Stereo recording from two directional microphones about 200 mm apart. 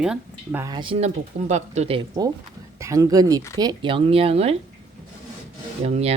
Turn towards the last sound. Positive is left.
turn(degrees=-30)  # may be behind; listen again after turning